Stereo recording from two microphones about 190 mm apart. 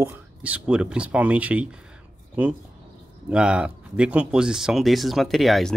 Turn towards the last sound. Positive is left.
turn(degrees=0)  # may be behind; listen again after turning